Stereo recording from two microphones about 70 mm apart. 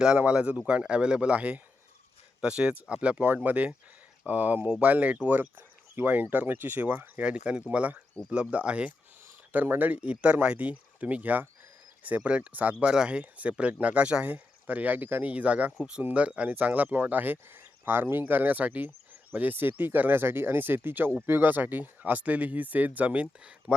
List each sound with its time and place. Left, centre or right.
0.0 s speech: centre